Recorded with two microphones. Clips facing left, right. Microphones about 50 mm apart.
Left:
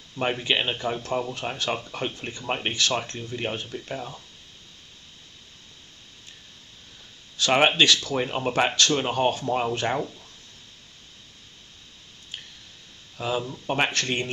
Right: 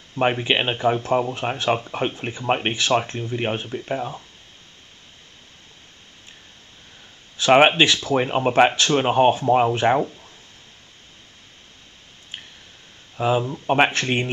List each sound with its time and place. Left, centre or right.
0.1 s speech: right
7.3 s speech: right
13.2 s speech: right